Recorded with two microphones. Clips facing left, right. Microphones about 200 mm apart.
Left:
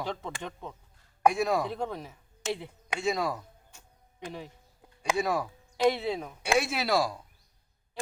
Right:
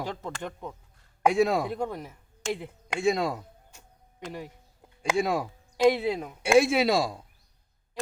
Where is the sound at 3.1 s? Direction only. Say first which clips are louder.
Right 2 dB; 25° right (ahead or behind).